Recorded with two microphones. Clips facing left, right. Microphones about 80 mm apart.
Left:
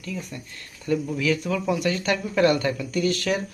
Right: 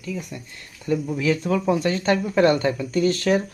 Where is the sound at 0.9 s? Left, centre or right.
Centre.